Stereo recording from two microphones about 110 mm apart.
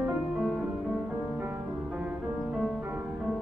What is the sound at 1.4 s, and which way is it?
Music, 15° right (ahead or behind).